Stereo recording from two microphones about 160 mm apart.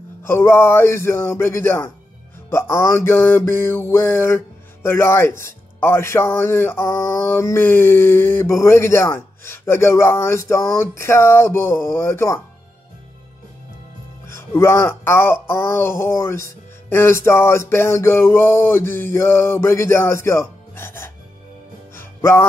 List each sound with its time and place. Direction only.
0.2 s speech: 15° left (ahead or behind)
14.2 s speech: 15° left (ahead or behind)
21.9 s music: 15° left (ahead or behind)